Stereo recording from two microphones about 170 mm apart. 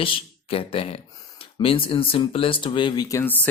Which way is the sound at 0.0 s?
30° left (ahead or behind).